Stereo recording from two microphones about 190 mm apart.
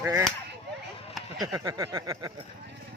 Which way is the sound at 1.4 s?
15° right (ahead or behind).